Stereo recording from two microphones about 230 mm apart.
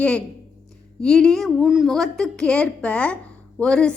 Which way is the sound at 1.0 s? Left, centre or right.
Centre.